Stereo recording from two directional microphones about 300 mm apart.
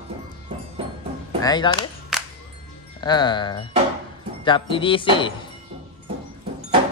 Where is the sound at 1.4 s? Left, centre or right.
Centre.